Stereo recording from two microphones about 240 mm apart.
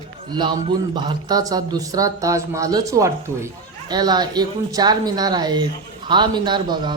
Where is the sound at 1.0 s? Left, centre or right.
Centre.